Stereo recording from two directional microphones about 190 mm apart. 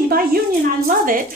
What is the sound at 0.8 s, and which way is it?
Speech, 45° right (ahead or behind).